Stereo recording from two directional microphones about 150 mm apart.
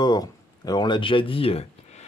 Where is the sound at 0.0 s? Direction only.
25° left (ahead or behind).